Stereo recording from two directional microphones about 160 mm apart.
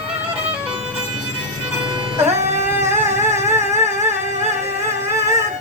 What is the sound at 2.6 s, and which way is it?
Music, 15° right (ahead or behind).